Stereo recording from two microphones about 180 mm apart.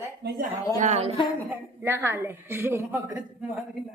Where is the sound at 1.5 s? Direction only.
15° right (ahead or behind).